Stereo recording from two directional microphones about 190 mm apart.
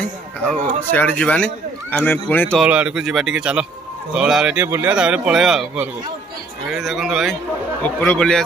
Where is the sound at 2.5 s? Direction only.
5° right (ahead or behind).